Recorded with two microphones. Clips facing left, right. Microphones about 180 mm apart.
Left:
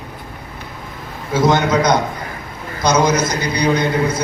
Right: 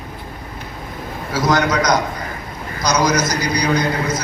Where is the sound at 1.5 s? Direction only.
25° left (ahead or behind).